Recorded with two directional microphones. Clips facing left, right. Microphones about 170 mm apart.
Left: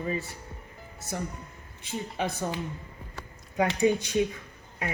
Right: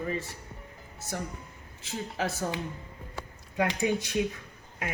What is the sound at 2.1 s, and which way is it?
Speech, centre (ahead or behind).